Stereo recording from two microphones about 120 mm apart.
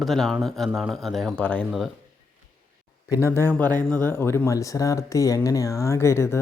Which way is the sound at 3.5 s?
15° left (ahead or behind).